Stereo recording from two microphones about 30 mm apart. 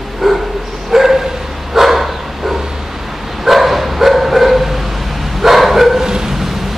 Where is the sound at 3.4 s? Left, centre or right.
Centre.